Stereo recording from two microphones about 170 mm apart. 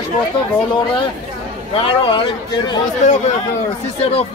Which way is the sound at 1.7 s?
30° left (ahead or behind).